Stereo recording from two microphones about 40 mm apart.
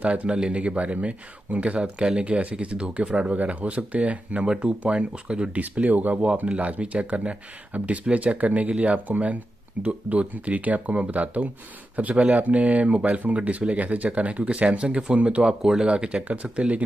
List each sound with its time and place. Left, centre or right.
0.0 s speech: right
5.5 s speech: right
15.6 s speech: centre
15.9 s speech: right